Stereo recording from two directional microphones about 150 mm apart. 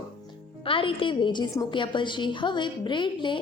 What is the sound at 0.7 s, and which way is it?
A woman's voice, 35° left (ahead or behind).